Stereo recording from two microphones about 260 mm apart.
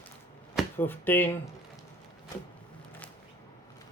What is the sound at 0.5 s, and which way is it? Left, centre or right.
Speech, centre.